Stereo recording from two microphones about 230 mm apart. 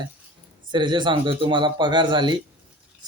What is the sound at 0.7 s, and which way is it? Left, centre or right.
Speech, centre.